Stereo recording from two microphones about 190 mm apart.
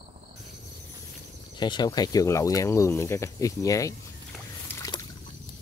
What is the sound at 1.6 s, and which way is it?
Speech, 25° left (ahead or behind).